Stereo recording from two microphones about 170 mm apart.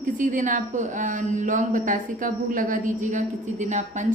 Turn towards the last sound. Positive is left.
turn(degrees=-45)  # may be behind; listen again after turning